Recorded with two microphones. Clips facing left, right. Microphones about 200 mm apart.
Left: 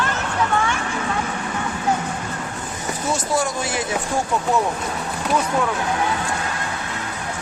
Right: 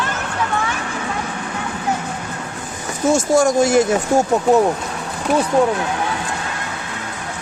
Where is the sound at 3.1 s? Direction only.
45° right (ahead or behind).